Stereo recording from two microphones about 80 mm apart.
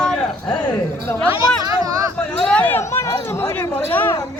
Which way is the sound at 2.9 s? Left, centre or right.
Left.